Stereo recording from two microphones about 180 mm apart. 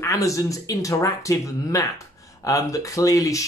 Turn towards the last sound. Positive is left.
turn(degrees=20)  # may be behind; listen again after turning